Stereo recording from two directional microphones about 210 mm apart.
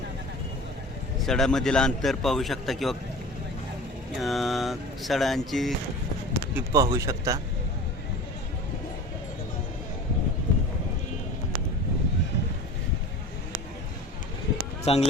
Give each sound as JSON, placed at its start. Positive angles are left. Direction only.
{"t": 1.2, "sound": "a man's voice", "side_deg": 0}
{"t": 4.2, "sound": "a man's voice", "side_deg": 0}
{"t": 6.5, "sound": "speech", "side_deg": -10}
{"t": 14.9, "sound": "speech", "side_deg": 30}